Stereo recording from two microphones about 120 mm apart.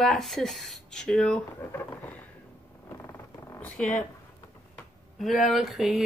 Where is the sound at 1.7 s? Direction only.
15° left (ahead or behind).